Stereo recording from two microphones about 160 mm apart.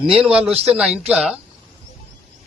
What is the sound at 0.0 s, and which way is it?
A man's voice, 5° right (ahead or behind).